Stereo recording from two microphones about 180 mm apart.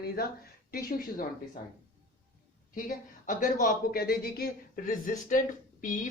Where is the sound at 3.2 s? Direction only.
50° left (ahead or behind).